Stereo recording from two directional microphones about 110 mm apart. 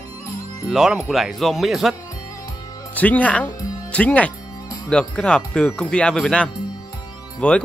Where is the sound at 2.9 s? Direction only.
15° left (ahead or behind).